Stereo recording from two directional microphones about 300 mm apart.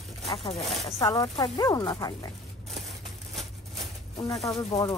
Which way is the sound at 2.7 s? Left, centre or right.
Centre.